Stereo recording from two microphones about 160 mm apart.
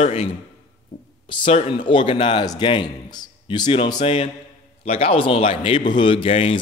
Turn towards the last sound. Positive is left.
turn(degrees=35)  # may be behind; listen again after turning